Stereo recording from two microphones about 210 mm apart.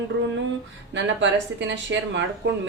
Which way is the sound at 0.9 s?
60° right (ahead or behind).